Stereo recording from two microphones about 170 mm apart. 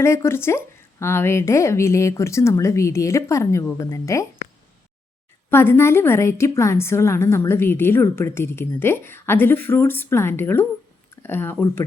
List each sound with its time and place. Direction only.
0.0 s a woman's voice: 15° left (ahead or behind)
5.5 s a woman's voice: 15° left (ahead or behind)